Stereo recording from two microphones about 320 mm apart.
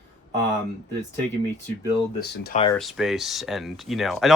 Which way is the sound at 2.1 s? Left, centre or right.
Left.